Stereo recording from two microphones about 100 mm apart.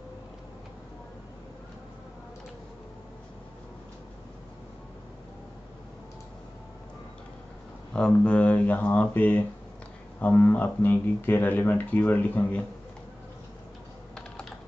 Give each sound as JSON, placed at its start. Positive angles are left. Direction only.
{"t": 7.9, "sound": "speech", "side_deg": 10}